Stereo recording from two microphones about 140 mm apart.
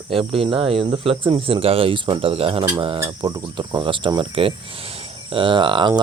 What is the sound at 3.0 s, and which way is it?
Speech, 25° right (ahead or behind).